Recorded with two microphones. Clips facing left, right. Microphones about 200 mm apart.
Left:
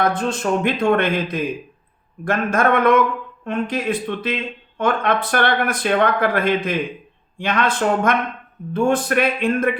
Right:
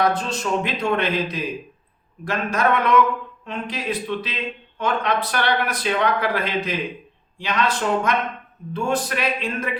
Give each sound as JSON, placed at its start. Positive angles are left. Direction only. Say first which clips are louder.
{"t": 0.0, "sound": "speech", "louder": "left 2 dB", "side_deg": 50}